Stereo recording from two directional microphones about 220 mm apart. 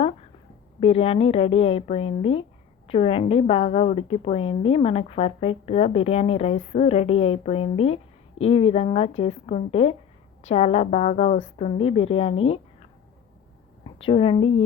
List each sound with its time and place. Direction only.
0.8 s a woman's voice: 25° left (ahead or behind)
14.0 s a woman's voice: 25° left (ahead or behind)